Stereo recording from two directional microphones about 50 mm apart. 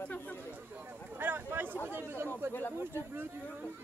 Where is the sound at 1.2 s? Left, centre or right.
Right.